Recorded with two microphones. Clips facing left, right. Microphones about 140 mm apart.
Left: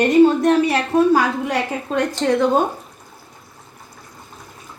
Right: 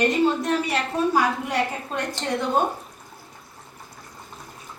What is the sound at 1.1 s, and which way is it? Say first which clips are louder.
A woman's voice: left 5 dB; 90° left.